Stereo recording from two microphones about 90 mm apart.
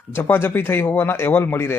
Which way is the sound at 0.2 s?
25° left (ahead or behind).